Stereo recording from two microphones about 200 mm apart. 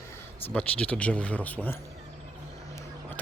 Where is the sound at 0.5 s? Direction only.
5° left (ahead or behind).